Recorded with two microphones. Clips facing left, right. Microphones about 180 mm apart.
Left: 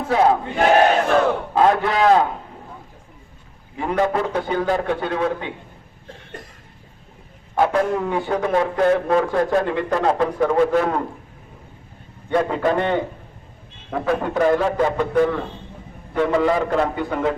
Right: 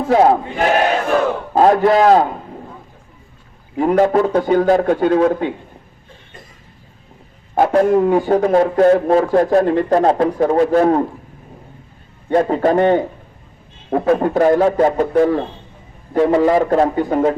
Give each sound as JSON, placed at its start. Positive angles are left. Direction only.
{"t": 0.1, "sound": "a man's voice", "side_deg": -35}
{"t": 1.5, "sound": "a man's voice", "side_deg": -40}
{"t": 3.8, "sound": "a man's voice", "side_deg": -45}
{"t": 7.5, "sound": "a man's voice", "side_deg": -40}
{"t": 12.3, "sound": "a man's voice", "side_deg": -40}